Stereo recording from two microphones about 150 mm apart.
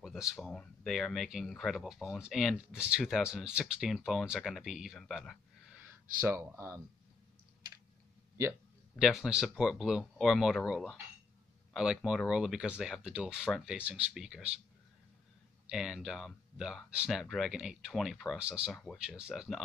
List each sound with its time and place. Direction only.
0.0 s speech: 5° right (ahead or behind)
6.2 s speech: 20° right (ahead or behind)
8.9 s speech: 5° right (ahead or behind)
11.7 s speech: 5° right (ahead or behind)
15.7 s speech: 5° right (ahead or behind)